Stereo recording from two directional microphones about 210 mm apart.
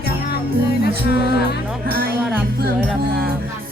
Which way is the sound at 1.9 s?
45° right (ahead or behind).